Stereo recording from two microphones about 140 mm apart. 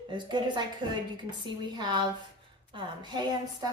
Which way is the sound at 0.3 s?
35° right (ahead or behind).